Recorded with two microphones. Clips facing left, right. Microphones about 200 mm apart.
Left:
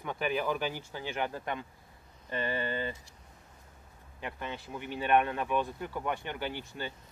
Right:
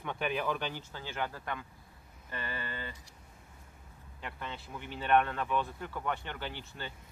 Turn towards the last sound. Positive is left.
turn(degrees=15)  # may be behind; listen again after turning